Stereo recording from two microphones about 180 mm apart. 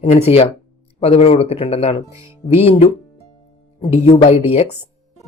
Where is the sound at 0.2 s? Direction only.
35° left (ahead or behind).